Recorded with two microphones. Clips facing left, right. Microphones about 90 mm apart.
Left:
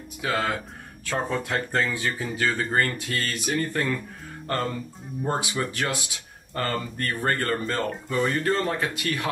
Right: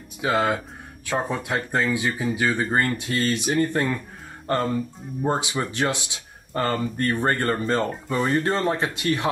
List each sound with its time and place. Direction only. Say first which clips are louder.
0.2 s speech: right 4 dB; 20° right (ahead or behind)